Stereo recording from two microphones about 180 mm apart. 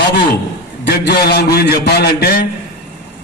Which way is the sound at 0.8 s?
65° left (ahead or behind).